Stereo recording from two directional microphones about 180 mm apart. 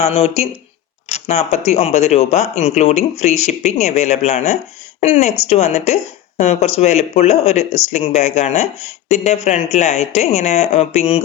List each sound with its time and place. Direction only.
0.0 s a woman's voice: 35° left (ahead or behind)